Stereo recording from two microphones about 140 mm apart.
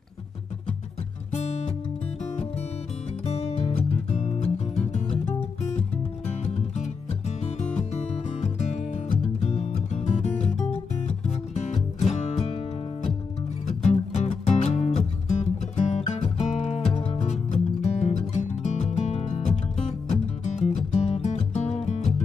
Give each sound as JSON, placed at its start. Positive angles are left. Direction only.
{"t": 1.3, "sound": "guitar", "side_deg": 45}
{"t": 3.3, "sound": "music", "side_deg": 50}
{"t": 6.4, "sound": "music", "side_deg": 50}
{"t": 13.7, "sound": "music", "side_deg": 50}